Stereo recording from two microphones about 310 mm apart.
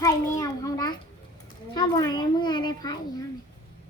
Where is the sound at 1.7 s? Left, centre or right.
Centre.